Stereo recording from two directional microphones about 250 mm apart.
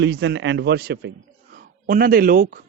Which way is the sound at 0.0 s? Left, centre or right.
Right.